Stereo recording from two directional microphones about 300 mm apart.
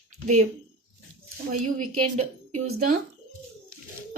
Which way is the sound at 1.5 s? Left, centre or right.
Right.